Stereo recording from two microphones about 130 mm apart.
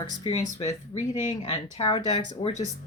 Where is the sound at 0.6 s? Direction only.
60° left (ahead or behind).